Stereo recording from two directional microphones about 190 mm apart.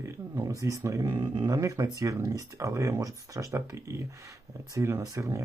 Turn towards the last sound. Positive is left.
turn(degrees=-15)  # may be behind; listen again after turning